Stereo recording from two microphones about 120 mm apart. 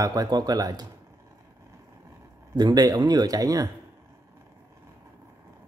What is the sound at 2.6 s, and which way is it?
Speech, 35° right (ahead or behind).